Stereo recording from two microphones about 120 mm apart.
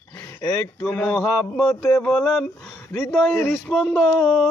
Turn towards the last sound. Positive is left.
turn(degrees=0)  # may be behind; listen again after turning